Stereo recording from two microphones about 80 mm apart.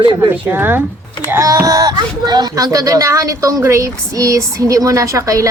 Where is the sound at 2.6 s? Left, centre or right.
Right.